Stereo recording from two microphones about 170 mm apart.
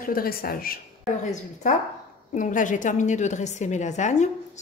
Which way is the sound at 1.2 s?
45° left (ahead or behind).